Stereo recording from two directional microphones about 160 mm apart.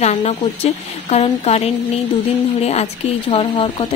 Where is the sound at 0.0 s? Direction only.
45° left (ahead or behind).